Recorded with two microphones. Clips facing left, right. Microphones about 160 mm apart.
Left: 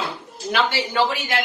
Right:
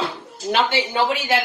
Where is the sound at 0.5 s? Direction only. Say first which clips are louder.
Right 2 dB; 20° right (ahead or behind).